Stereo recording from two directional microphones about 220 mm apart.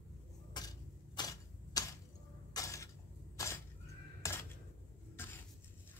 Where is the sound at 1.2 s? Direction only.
15° left (ahead or behind).